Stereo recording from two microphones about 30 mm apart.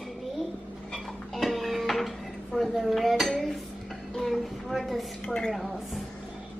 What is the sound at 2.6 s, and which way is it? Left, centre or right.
Dishes, centre.